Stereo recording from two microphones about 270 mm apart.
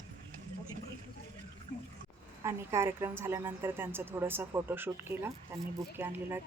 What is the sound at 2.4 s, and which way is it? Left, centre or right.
A woman's voice, centre.